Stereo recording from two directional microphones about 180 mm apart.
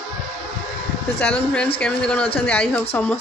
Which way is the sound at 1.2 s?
5° left (ahead or behind).